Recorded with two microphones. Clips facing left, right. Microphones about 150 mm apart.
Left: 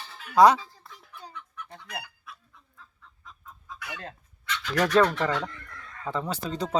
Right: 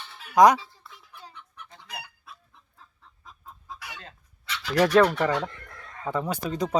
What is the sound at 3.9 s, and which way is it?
Fowl, 55° left (ahead or behind).